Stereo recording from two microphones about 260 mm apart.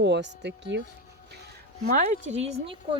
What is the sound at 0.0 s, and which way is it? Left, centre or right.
Speech, right.